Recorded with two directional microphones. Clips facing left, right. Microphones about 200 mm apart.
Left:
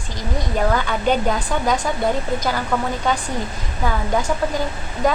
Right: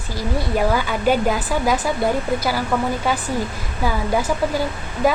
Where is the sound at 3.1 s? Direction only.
5° right (ahead or behind).